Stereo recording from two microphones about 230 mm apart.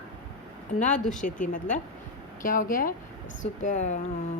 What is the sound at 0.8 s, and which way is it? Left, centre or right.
A woman's voice, left.